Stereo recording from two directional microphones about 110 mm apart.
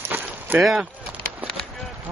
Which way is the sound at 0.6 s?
Centre (ahead or behind).